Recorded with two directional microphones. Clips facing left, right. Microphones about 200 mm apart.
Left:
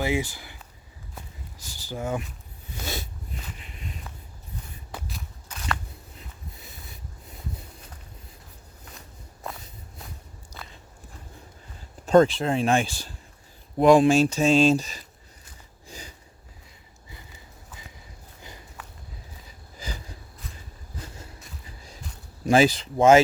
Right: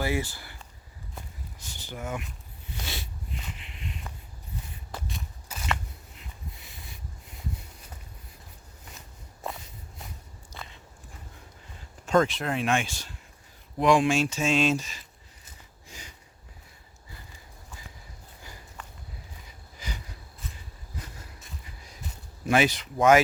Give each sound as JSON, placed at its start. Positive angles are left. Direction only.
{"t": 0.0, "sound": "speech", "side_deg": 15}
{"t": 1.5, "sound": "speech", "side_deg": 35}
{"t": 4.1, "sound": "walk", "side_deg": 5}
{"t": 4.9, "sound": "a sound", "side_deg": 0}
{"t": 9.0, "sound": "walk", "side_deg": 0}
{"t": 12.0, "sound": "speech", "side_deg": 35}
{"t": 15.9, "sound": "snort", "side_deg": 35}
{"t": 22.4, "sound": "speech", "side_deg": 30}